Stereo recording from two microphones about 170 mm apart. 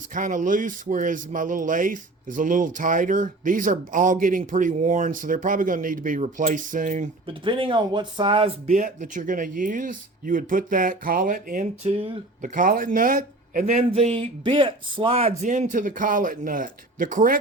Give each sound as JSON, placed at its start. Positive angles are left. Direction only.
{"t": 0.1, "sound": "speech", "side_deg": -50}
{"t": 7.4, "sound": "speech", "side_deg": -30}
{"t": 11.8, "sound": "speech", "side_deg": -35}
{"t": 12.4, "sound": "speech", "side_deg": -55}